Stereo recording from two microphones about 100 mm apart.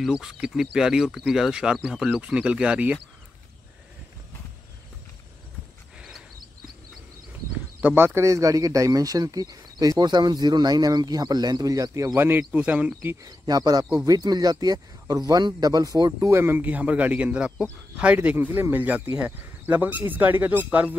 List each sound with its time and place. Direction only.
0.0 s speech: 5° right (ahead or behind)
5.9 s a sound: 5° right (ahead or behind)
7.8 s speech: 20° right (ahead or behind)
12.2 s speech: 20° right (ahead or behind)
13.2 s speech: 40° right (ahead or behind)
16.1 s speech: 25° right (ahead or behind)